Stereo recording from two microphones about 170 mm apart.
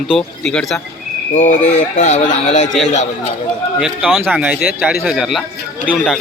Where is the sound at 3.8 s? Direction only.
Centre (ahead or behind).